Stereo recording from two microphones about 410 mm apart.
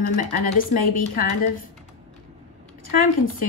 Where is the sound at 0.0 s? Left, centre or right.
Centre.